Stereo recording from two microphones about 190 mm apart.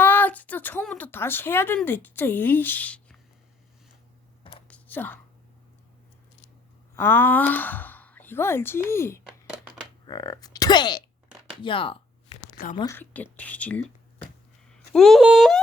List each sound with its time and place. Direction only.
0.0 s a woman's voice: 10° left (ahead or behind)
4.7 s whispering: 10° left (ahead or behind)
6.9 s speech: 10° left (ahead or behind)
9.2 s a sound: centre (ahead or behind)
10.1 s speech: 20° left (ahead or behind)
12.7 s speech: 15° left (ahead or behind); by 15.6 s centre (ahead or behind)